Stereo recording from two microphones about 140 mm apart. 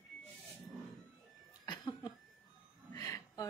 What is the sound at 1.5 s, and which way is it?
Laughter, 30° left (ahead or behind).